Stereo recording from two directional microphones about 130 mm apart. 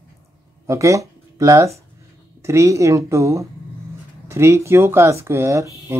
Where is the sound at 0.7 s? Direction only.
25° right (ahead or behind).